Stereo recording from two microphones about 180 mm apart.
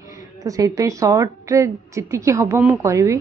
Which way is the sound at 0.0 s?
20° right (ahead or behind).